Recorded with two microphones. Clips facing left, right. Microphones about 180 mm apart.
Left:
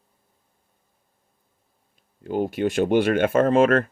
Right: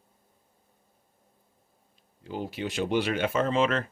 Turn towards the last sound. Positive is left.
turn(degrees=50)  # may be behind; listen again after turning